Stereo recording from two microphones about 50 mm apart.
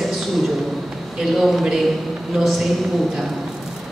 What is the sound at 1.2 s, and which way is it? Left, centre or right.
A woman's voice, centre.